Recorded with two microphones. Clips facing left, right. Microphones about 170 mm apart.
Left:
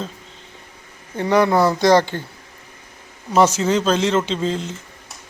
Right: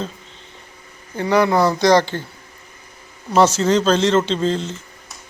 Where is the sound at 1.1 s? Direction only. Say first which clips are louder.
Even; 20° left (ahead or behind).